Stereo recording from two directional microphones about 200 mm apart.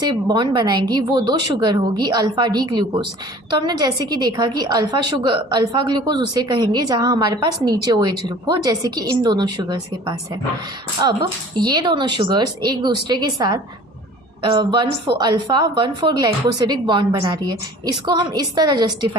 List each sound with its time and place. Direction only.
0.0 s a woman's voice: 20° right (ahead or behind)